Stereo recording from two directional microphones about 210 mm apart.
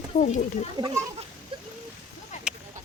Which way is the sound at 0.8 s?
20° right (ahead or behind).